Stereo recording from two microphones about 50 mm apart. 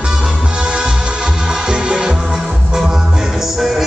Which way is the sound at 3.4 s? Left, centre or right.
Centre.